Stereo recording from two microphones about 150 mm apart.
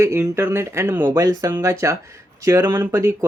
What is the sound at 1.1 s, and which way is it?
Speech, 25° right (ahead or behind).